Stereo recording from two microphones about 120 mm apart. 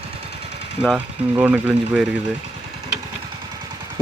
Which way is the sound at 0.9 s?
15° right (ahead or behind).